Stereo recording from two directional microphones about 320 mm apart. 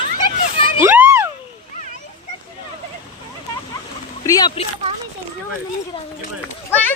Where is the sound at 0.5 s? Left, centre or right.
Centre.